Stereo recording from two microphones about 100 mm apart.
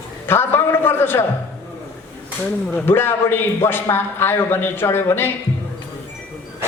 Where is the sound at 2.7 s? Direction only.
20° left (ahead or behind).